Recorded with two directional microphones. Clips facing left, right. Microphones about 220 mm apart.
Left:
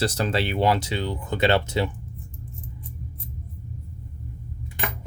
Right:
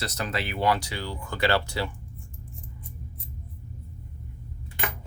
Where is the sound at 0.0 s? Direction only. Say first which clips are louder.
Left 7 dB; 30° left (ahead or behind).